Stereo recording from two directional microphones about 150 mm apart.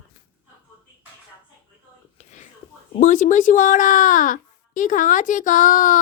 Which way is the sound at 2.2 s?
50° left (ahead or behind).